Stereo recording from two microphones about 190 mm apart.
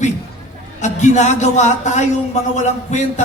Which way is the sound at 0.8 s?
40° left (ahead or behind).